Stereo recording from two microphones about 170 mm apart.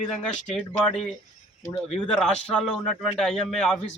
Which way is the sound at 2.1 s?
5° left (ahead or behind).